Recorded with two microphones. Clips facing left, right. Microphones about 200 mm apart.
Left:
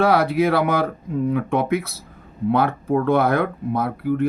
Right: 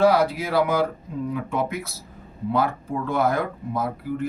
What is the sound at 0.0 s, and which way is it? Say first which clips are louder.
Speech: left 2 dB; 60° left (ahead or behind).